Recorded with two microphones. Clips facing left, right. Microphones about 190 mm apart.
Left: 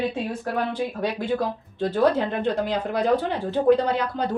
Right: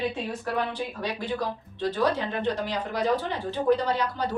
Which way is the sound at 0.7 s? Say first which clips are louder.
Left 5 dB; 50° left (ahead or behind).